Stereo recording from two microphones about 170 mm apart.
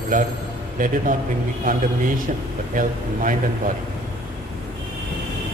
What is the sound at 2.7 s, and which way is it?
Speech, 50° right (ahead or behind).